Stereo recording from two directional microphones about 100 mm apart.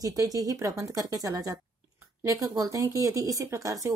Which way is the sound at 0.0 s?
35° right (ahead or behind).